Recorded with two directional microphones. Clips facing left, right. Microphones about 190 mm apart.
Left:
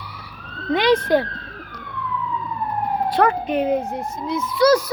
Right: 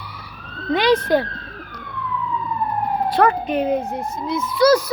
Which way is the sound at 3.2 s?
10° left (ahead or behind).